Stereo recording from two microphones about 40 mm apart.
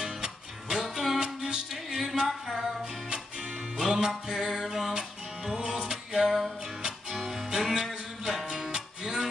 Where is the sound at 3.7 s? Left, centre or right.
Centre.